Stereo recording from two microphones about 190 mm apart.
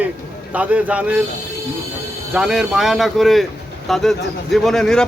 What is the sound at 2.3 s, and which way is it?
Speech, 5° right (ahead or behind).